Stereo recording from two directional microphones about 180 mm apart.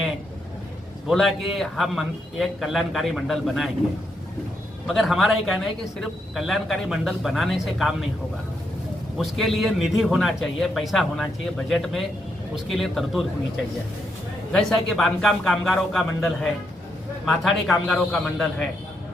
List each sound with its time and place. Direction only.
1.0 s a man's voice: centre (ahead or behind)
4.9 s a man's voice: centre (ahead or behind)
9.1 s a man's voice: centre (ahead or behind)
14.5 s a man's voice: 5° left (ahead or behind)